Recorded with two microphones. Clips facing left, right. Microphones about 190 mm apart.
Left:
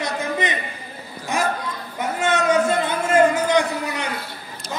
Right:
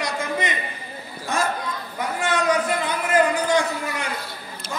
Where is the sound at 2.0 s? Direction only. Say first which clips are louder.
Left 3 dB; 20° left (ahead or behind).